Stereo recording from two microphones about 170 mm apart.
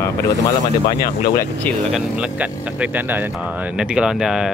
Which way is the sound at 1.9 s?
10° right (ahead or behind).